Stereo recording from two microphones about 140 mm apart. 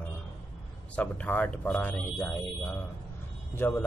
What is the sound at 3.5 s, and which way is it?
Speech, 15° left (ahead or behind).